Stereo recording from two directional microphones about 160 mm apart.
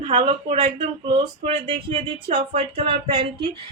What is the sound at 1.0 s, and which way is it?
Speech, 30° right (ahead or behind).